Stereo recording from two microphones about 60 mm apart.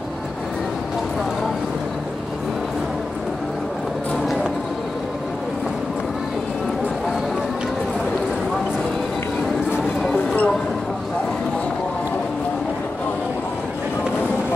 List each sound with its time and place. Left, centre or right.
10.1 s mouse: left